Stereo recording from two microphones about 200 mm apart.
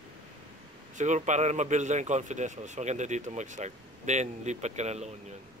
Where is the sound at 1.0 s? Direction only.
35° right (ahead or behind).